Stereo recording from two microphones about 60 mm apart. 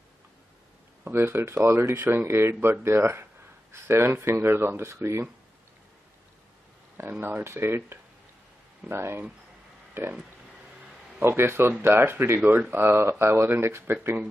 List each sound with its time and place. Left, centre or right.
1.0 s speech: right
7.0 s speech: right
8.8 s speech: centre
10.0 s speech: right
11.2 s speech: right
12.4 s speech: right